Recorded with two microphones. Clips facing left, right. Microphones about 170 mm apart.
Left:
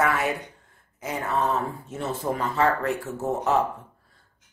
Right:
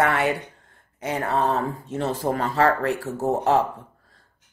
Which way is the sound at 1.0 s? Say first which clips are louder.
Right 3 dB; 35° right (ahead or behind).